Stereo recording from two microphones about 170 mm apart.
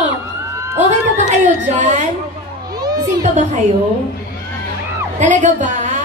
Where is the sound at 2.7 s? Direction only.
25° right (ahead or behind).